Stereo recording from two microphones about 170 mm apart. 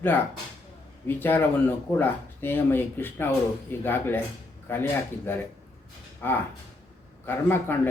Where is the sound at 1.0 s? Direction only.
10° left (ahead or behind).